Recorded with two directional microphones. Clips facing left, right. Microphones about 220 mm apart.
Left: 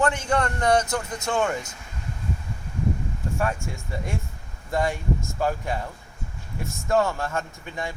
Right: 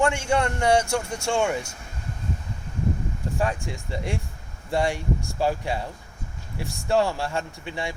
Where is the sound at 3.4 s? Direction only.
15° right (ahead or behind).